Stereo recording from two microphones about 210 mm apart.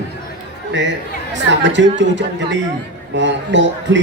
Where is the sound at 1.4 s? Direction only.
60° right (ahead or behind).